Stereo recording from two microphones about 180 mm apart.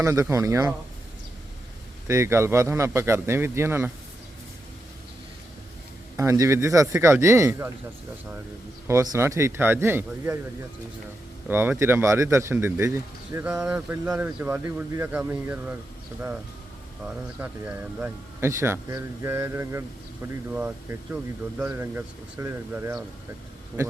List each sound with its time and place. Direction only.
0.0 s speech: 15° right (ahead or behind)
2.0 s speech: 15° right (ahead or behind)
6.1 s speech: 15° right (ahead or behind)
8.9 s speech: 15° right (ahead or behind)
11.4 s speech: 10° right (ahead or behind)
17.4 s speech: 10° right (ahead or behind)